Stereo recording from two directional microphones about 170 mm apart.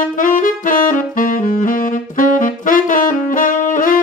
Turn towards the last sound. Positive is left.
turn(degrees=50)  # may be behind; listen again after turning